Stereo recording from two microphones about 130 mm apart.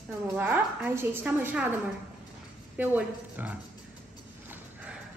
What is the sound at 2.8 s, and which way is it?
Speech, 10° right (ahead or behind).